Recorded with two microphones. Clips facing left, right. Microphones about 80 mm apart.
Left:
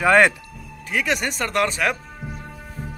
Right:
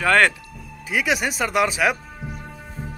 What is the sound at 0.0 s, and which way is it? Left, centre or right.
Speech, centre.